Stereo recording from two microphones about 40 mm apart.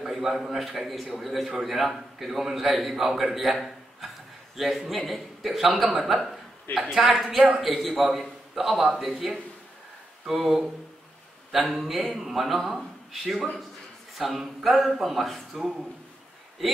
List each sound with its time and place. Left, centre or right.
0.0 s a man's voice: centre
6.0 s chuckle: centre
6.9 s a man's voice: centre
11.5 s a man's voice: centre
15.5 s speech: right